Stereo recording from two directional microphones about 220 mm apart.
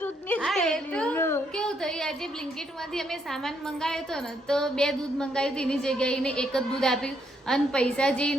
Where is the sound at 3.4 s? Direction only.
Centre (ahead or behind).